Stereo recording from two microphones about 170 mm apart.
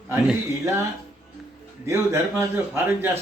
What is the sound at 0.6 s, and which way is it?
Speech, 20° right (ahead or behind).